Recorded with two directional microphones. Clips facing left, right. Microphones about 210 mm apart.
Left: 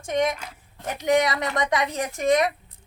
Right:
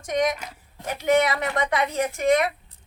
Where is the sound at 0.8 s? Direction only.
20° left (ahead or behind).